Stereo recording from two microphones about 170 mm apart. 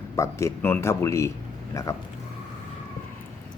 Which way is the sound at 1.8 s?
20° left (ahead or behind).